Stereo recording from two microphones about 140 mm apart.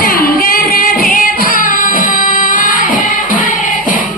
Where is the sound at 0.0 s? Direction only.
90° left.